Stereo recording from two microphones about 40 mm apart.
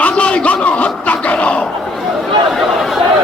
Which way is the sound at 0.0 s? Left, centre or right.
Left.